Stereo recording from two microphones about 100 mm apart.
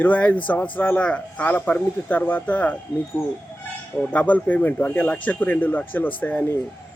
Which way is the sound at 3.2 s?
30° left (ahead or behind).